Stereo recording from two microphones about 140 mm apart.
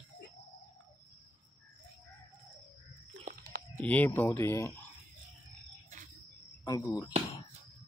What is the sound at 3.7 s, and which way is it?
Speech, 10° left (ahead or behind).